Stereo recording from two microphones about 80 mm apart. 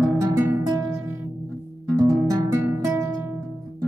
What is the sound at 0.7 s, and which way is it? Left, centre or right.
Music, right.